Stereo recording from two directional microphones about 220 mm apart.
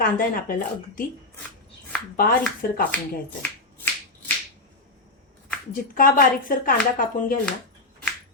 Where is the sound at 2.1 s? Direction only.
40° left (ahead or behind).